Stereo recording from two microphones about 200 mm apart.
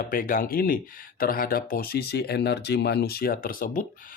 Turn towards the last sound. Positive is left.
turn(degrees=45)  # may be behind; listen again after turning